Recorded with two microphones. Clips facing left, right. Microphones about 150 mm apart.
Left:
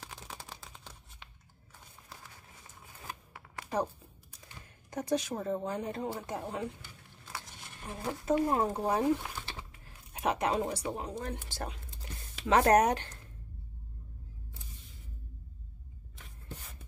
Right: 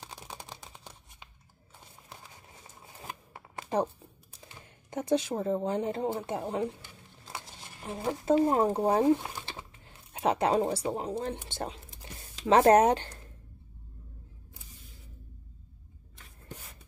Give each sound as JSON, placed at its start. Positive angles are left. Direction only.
{"t": 0.2, "sound": "computer keyboard", "side_deg": -20}
{"t": 2.0, "sound": "a sound", "side_deg": -25}
{"t": 4.3, "sound": "speech", "side_deg": -25}